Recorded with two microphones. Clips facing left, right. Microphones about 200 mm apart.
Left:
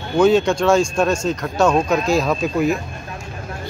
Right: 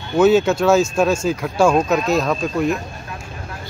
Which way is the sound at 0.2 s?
5° right (ahead or behind).